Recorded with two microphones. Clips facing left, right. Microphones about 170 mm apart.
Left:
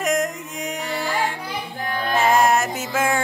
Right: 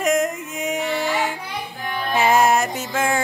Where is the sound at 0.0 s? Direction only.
Centre (ahead or behind).